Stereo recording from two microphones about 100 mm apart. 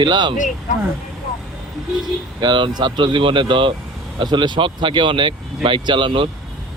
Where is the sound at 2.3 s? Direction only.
50° right (ahead or behind).